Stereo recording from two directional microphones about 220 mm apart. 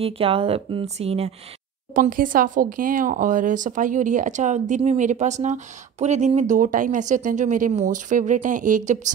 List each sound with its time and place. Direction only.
0.0 s speech: 25° right (ahead or behind)
2.0 s speech: 40° right (ahead or behind)